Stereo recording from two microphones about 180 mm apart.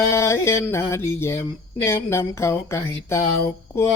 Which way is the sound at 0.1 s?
15° left (ahead or behind).